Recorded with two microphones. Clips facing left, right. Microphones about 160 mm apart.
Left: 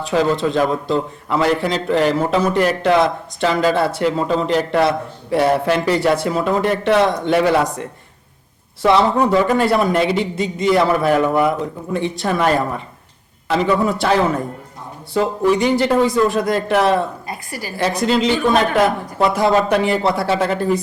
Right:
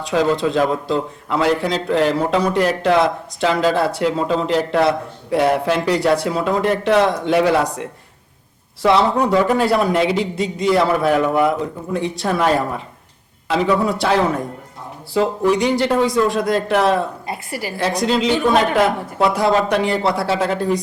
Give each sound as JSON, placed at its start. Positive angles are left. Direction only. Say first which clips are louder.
{"t": 0.0, "sound": "a man's voice", "louder": "even", "side_deg": 0}
{"t": 17.2, "sound": "a woman's voice", "louder": "right 2 dB", "side_deg": -25}
{"t": 17.7, "sound": "a man's voice", "louder": "left 1 dB", "side_deg": 0}